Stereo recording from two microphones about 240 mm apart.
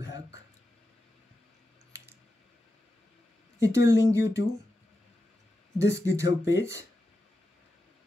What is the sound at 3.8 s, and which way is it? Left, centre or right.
Speech, centre.